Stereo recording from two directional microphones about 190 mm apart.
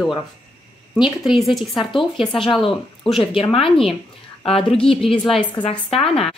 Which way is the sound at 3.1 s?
25° left (ahead or behind).